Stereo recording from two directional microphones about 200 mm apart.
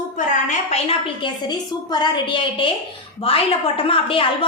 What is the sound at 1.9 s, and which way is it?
Speech, 25° left (ahead or behind).